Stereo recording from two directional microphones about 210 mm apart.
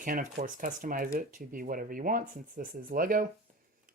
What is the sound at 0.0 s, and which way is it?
Speech, 40° right (ahead or behind).